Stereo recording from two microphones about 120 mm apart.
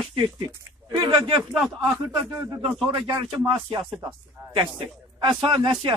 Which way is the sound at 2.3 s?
25° right (ahead or behind).